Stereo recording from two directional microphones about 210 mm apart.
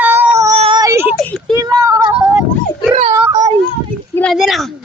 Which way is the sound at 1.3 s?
Centre (ahead or behind).